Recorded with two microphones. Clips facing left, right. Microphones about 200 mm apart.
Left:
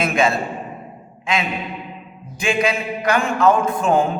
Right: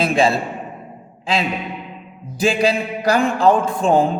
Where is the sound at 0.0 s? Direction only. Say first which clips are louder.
Right 2 dB; 30° right (ahead or behind).